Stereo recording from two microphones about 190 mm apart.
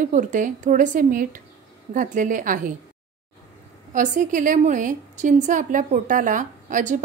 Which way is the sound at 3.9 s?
40° right (ahead or behind).